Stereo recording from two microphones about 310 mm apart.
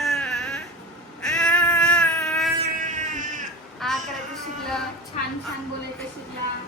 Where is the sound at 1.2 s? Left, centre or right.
Centre.